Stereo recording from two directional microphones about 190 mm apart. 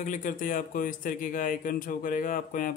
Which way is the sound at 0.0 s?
40° left (ahead or behind).